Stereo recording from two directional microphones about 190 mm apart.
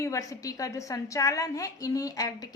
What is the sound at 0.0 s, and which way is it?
A woman's voice, 15° left (ahead or behind).